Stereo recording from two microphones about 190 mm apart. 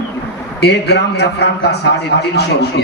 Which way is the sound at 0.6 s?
60° left (ahead or behind).